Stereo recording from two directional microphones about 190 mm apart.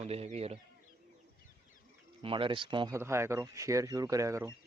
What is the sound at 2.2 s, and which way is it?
Speech, 25° right (ahead or behind).